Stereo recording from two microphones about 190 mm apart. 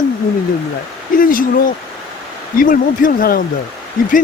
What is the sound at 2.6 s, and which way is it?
Speech, 45° left (ahead or behind).